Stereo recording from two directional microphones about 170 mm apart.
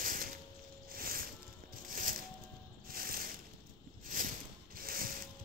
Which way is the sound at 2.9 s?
60° right (ahead or behind).